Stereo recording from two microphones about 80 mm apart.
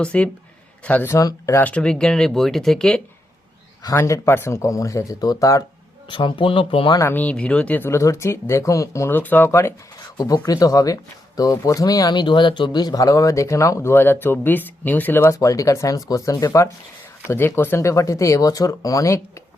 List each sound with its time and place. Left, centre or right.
0.0 s speech: centre
1.2 s speech: left
1.5 s speech: centre
3.9 s speech: left
6.1 s speech: left
7.1 s speech: centre
7.8 s speech: left
9.0 s speech: left
9.5 s speech: left
10.2 s speech: left
15.3 s speech: left
17.2 s speech: left
17.7 s speech: left